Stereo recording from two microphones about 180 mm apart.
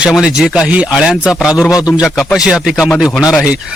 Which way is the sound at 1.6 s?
20° left (ahead or behind).